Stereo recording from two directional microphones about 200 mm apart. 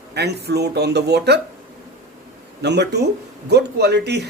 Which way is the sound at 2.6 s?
55° right (ahead or behind).